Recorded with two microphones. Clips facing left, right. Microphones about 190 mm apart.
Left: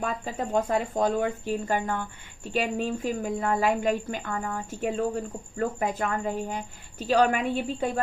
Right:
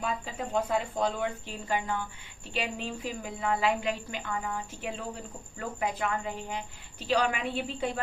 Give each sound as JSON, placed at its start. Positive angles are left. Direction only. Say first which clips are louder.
{"t": 0.0, "sound": "speech", "louder": "left 4 dB", "side_deg": 45}